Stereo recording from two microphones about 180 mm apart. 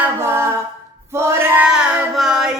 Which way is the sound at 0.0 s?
15° right (ahead or behind).